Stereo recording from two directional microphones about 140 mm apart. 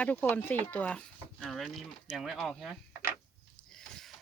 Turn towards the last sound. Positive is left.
turn(degrees=5)  # may be behind; listen again after turning